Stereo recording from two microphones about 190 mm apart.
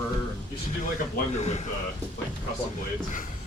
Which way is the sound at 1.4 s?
35° left (ahead or behind).